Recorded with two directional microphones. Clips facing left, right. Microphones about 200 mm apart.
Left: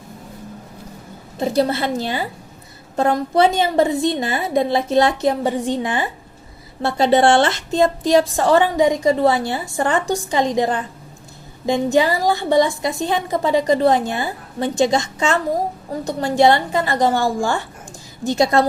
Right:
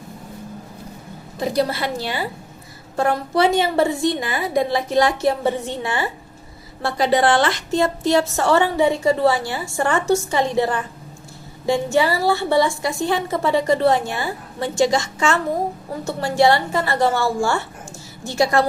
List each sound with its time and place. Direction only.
1.4 s speech: 25° left (ahead or behind)
2.9 s a woman's voice: 20° left (ahead or behind)